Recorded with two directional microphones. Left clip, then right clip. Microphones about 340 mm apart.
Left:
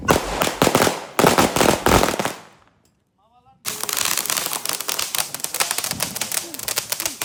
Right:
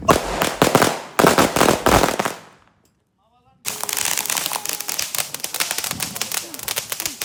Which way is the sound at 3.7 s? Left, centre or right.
Centre.